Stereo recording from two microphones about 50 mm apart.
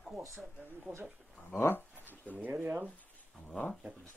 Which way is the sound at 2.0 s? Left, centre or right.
Left.